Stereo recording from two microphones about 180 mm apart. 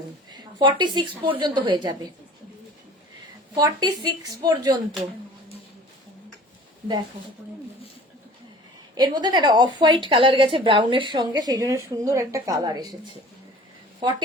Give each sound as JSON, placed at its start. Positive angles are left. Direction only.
{"t": 0.3, "sound": "a woman's voice", "side_deg": -25}
{"t": 3.5, "sound": "a woman's voice", "side_deg": -20}
{"t": 9.0, "sound": "a woman's voice", "side_deg": -20}